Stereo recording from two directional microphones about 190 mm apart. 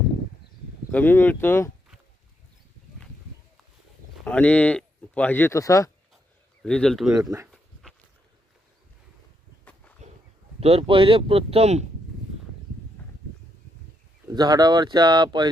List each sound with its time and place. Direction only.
0.9 s speech: 10° left (ahead or behind)
4.3 s speech: 10° left (ahead or behind)
6.6 s speech: 5° left (ahead or behind)
7.2 s speech: 20° right (ahead or behind)
7.5 s a sound: centre (ahead or behind)
10.6 s speech: 30° right (ahead or behind)
14.3 s speech: 20° right (ahead or behind)